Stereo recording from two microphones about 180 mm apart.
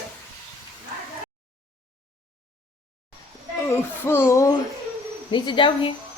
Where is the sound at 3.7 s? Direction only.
15° left (ahead or behind).